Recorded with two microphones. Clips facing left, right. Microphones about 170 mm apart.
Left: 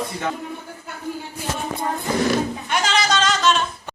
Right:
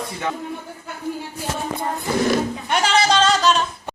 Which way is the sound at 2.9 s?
30° right (ahead or behind).